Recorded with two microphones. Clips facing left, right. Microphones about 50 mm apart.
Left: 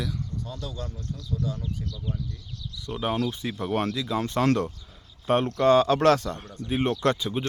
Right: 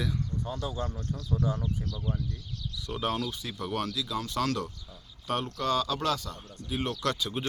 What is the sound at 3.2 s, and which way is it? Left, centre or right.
Speech, left.